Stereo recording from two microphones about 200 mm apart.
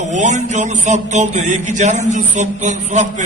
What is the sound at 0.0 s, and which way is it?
A man's voice, 35° right (ahead or behind).